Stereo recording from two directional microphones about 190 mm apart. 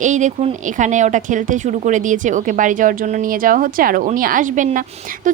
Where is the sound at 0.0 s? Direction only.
40° right (ahead or behind).